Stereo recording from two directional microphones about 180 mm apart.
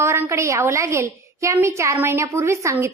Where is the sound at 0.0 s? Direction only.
15° right (ahead or behind).